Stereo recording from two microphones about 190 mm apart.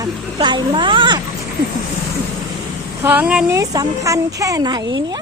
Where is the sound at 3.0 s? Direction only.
10° right (ahead or behind).